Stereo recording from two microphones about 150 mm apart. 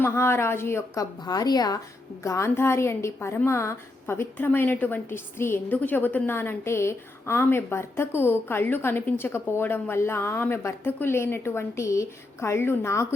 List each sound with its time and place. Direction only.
0.0 s a woman's voice: 15° left (ahead or behind)